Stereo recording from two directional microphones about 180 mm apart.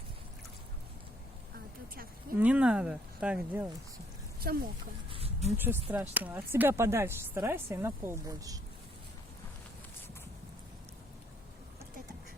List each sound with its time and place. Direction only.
2.4 s speech: 5° right (ahead or behind)
4.4 s speech: 55° right (ahead or behind)
5.0 s a sound: 30° right (ahead or behind)
5.5 s speech: 10° right (ahead or behind)